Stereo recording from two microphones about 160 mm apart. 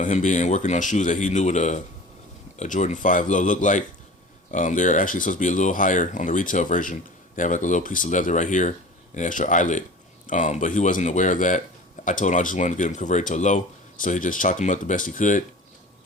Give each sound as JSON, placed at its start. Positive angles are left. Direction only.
{"t": 0.0, "sound": "speech", "side_deg": 50}